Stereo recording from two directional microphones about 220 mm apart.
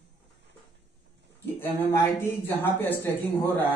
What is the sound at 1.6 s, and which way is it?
Speech, 10° left (ahead or behind).